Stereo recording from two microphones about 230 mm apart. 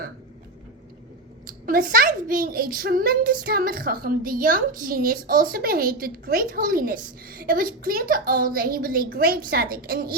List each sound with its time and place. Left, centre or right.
1.5 s a child's voice: right